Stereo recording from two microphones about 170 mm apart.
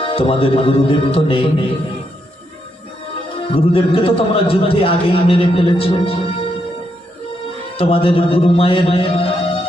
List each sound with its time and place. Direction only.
0.0 s a man's voice: 35° left (ahead or behind)
3.5 s a man's voice: 30° left (ahead or behind)
7.8 s a man's voice: 30° left (ahead or behind)